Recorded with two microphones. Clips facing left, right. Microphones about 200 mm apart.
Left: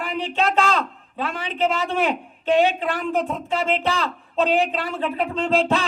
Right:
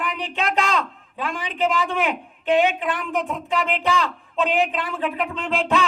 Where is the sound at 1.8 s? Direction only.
35° left (ahead or behind).